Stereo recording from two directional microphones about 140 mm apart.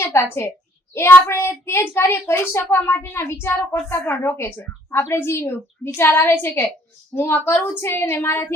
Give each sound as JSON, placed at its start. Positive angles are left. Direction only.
{"t": 0.0, "sound": "a woman's voice", "side_deg": 20}